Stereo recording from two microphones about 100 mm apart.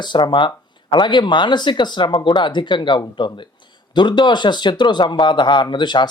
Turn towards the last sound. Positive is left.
turn(degrees=50)  # may be behind; listen again after turning